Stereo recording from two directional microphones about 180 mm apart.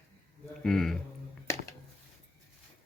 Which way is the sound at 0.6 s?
Centre (ahead or behind).